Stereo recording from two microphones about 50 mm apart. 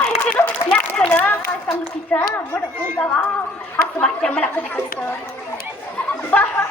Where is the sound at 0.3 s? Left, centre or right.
Left.